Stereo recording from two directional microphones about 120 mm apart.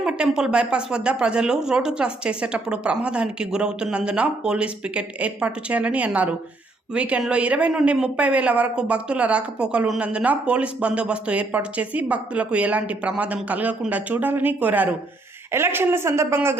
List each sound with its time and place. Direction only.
0.0 s speech: 5° right (ahead or behind)